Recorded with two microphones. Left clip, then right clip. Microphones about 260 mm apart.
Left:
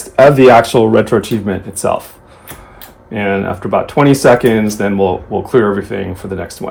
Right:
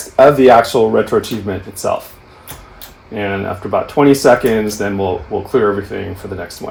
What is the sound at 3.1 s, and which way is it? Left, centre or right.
Speech, left.